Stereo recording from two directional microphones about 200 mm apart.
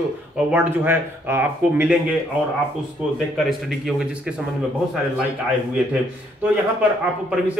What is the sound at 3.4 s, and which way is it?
Speech, centre (ahead or behind).